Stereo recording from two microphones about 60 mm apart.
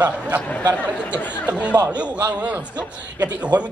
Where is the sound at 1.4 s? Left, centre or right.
Right.